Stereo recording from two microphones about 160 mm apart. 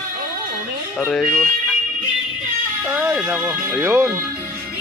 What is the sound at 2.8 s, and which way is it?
Speech, 10° right (ahead or behind).